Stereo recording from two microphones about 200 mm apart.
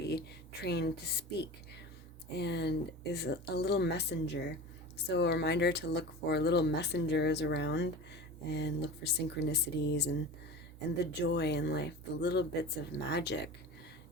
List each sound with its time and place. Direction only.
0.0 s speech: 55° left (ahead or behind)